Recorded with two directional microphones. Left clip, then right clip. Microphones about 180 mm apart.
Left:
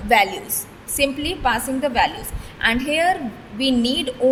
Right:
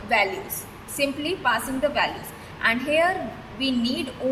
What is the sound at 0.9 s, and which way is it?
A woman's voice, 65° left (ahead or behind).